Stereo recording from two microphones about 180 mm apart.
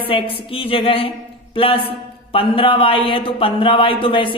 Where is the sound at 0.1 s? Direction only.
30° left (ahead or behind).